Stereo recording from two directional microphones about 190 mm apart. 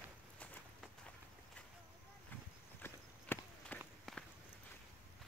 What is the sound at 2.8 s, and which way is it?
Clip-clop, 10° left (ahead or behind).